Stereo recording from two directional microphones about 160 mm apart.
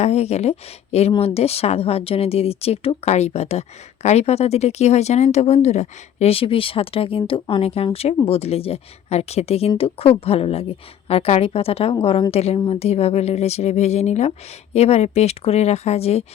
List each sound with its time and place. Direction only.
0.0 s a woman's voice: 40° left (ahead or behind)